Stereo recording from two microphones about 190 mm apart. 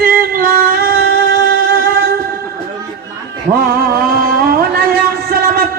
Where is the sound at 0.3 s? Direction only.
50° right (ahead or behind).